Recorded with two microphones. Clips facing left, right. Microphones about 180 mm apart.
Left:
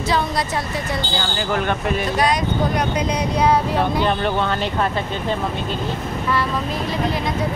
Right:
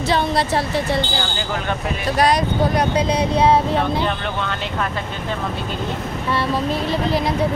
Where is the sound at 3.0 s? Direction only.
30° right (ahead or behind).